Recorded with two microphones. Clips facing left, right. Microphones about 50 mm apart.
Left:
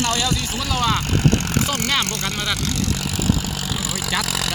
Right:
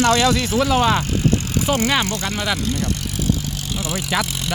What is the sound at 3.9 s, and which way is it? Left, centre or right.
Speech, centre.